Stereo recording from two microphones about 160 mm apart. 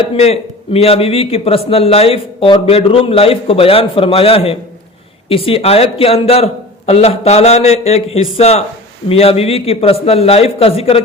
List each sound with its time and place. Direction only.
0.2 s a man's voice: 40° left (ahead or behind)